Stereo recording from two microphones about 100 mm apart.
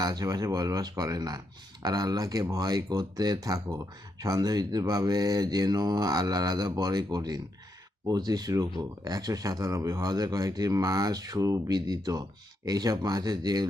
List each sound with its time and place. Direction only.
0.0 s speech: 40° right (ahead or behind)